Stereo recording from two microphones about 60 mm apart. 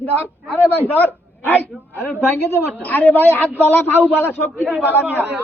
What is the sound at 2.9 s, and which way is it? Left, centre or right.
A man's voice, left.